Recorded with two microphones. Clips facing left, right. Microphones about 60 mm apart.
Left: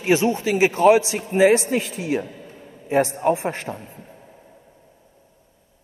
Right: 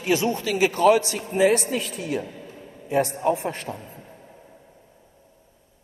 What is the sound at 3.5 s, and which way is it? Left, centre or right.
Speech, left.